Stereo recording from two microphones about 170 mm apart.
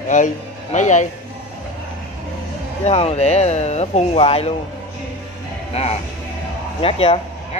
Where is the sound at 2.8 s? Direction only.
40° left (ahead or behind).